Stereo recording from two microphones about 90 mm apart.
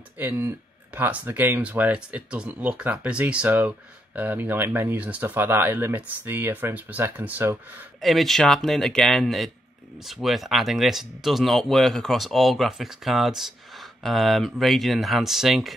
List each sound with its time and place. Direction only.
0.2 s speech: 25° right (ahead or behind)
8.0 s speech: centre (ahead or behind)